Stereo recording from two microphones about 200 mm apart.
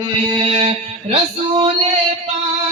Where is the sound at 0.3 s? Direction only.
25° right (ahead or behind).